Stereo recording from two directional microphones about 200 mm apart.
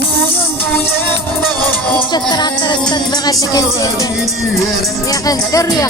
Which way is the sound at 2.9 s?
20° left (ahead or behind).